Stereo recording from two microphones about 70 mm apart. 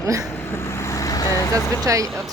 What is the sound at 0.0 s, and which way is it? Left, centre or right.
Speech, right.